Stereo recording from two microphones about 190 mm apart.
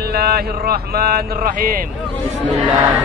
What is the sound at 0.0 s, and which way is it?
Speech, 55° right (ahead or behind).